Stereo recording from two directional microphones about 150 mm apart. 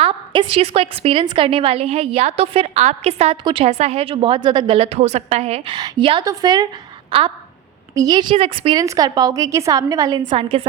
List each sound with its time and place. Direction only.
0.0 s a woman's voice: 35° right (ahead or behind)
5.7 s a woman's voice: 30° right (ahead or behind)
8.8 s a woman's voice: 25° right (ahead or behind)
10.3 s a woman's voice: 35° right (ahead or behind)